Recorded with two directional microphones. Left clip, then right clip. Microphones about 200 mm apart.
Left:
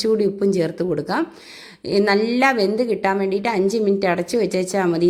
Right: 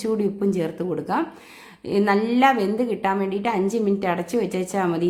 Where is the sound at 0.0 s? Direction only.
20° left (ahead or behind).